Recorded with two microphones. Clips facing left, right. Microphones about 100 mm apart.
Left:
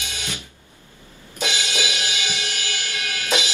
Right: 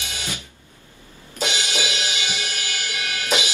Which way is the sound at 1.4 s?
20° right (ahead or behind).